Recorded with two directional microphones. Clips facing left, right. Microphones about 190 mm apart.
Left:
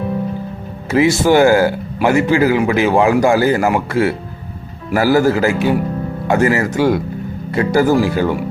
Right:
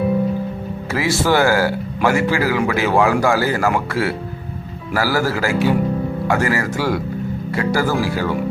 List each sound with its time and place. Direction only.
0.9 s a man's voice: 20° left (ahead or behind)